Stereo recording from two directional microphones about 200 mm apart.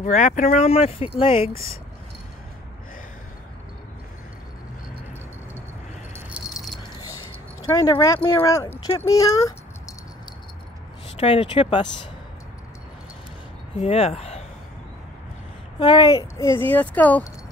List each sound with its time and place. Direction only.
0.0 s speech: 35° left (ahead or behind)
6.1 s keys jangling: 5° right (ahead or behind)
7.6 s speech: 20° left (ahead or behind)
11.1 s speech: 30° left (ahead or behind)
13.7 s speech: 30° left (ahead or behind)
15.8 s speech: 20° left (ahead or behind)